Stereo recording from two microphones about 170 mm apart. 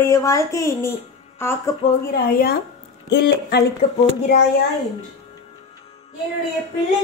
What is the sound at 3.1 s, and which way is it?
Speech, 70° left (ahead or behind).